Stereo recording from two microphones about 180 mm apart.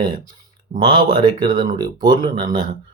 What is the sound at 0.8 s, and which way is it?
Speech, 25° right (ahead or behind).